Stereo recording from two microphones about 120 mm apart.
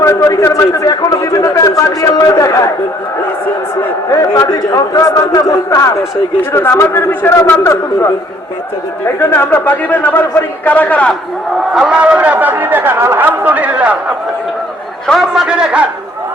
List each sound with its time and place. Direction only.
0.0 s a man's voice: 25° left (ahead or behind)
4.1 s a man's voice: 25° left (ahead or behind)
9.3 s a man's voice: 20° left (ahead or behind)
11.7 s speech: 5° right (ahead or behind)
15.0 s a man's voice: centre (ahead or behind)